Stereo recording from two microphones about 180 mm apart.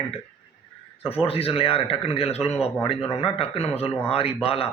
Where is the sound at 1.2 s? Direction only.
30° left (ahead or behind).